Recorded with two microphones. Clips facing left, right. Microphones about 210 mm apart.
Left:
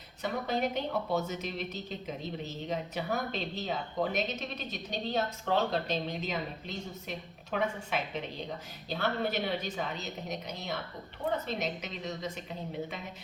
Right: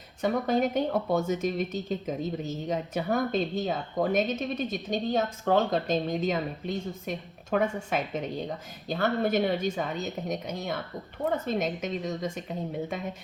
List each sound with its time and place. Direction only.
0.2 s speech: 50° right (ahead or behind)